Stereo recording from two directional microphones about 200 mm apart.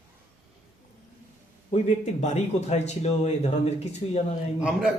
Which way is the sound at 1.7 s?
35° left (ahead or behind).